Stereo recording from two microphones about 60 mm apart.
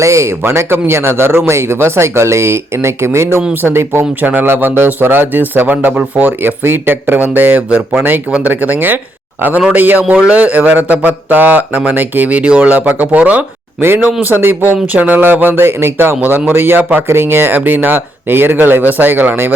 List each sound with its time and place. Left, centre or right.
0.0 s speech: right
8.3 s speech: right
14.3 s speech: right